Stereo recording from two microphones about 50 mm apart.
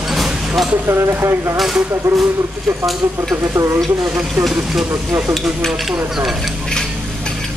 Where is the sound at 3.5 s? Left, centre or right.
Right.